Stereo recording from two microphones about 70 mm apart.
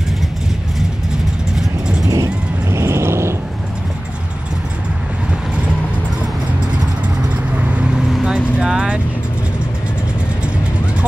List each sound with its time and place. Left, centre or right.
2.0 s vehicle: right
7.5 s vehicle: centre